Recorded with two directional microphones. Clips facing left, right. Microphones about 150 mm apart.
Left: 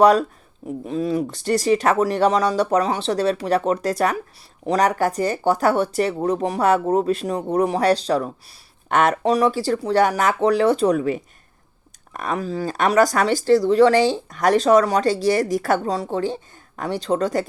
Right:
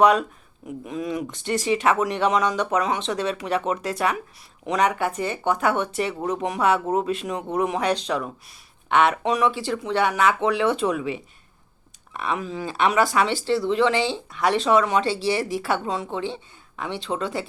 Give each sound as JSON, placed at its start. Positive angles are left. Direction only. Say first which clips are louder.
{"t": 0.0, "sound": "speech", "louder": "left 3 dB", "side_deg": 35}